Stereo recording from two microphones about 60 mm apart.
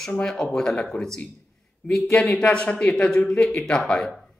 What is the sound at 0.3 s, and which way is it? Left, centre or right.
Speech, centre.